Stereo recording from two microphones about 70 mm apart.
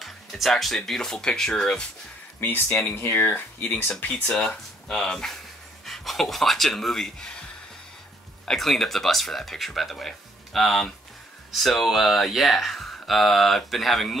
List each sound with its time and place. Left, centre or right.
0.0 s speech: centre
3.1 s speech: left
4.1 s speech: centre
8.5 s speech: centre